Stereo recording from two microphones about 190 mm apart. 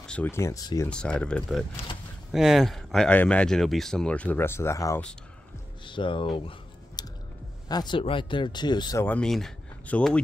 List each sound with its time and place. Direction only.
0.0 s speech: 5° left (ahead or behind)
0.8 s speech: 5° left (ahead or behind)
5.9 s speech: 25° left (ahead or behind)
7.0 s music: 20° left (ahead or behind)
7.6 s speech: 20° left (ahead or behind)
9.0 s speech: 5° left (ahead or behind)